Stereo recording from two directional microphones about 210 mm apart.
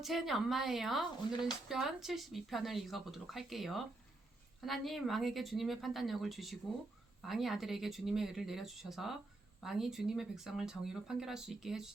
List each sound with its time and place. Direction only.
0.0 s speech: centre (ahead or behind)